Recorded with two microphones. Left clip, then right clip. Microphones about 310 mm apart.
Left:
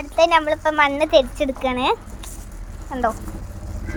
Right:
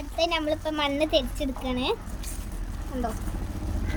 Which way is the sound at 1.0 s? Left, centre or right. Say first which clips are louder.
Left 9 dB; centre.